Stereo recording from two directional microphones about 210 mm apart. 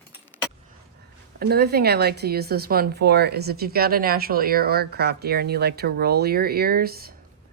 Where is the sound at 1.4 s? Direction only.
50° right (ahead or behind).